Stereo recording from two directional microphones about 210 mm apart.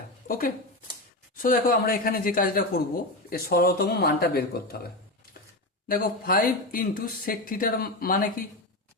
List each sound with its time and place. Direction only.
0.3 s speech: 40° left (ahead or behind)
5.9 s speech: 45° left (ahead or behind)